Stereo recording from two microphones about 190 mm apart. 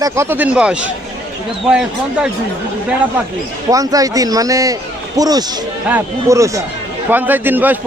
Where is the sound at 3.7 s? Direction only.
20° right (ahead or behind).